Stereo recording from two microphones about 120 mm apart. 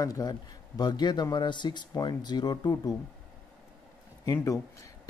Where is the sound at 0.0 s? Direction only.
30° left (ahead or behind).